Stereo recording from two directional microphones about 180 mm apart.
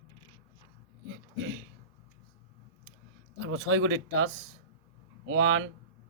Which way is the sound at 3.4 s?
90° right.